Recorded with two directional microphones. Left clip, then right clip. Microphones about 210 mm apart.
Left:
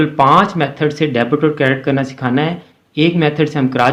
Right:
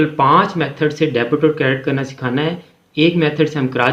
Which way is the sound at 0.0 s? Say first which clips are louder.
Left 2 dB; 35° left (ahead or behind).